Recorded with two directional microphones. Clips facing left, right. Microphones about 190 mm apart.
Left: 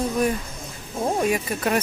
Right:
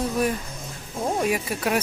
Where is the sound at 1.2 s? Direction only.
5° right (ahead or behind).